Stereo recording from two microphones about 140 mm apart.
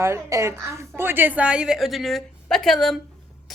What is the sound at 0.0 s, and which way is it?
A woman's voice, 20° right (ahead or behind).